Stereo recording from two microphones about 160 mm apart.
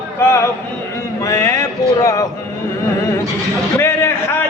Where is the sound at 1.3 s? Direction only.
20° left (ahead or behind).